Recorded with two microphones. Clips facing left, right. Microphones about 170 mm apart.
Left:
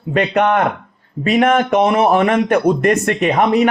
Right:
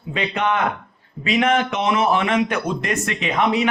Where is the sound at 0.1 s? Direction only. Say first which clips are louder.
Left 7 dB; 55° left (ahead or behind).